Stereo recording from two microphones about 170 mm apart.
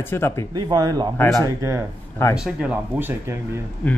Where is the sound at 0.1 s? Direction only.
15° left (ahead or behind).